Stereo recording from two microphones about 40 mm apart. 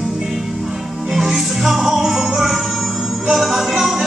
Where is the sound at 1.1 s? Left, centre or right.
Centre.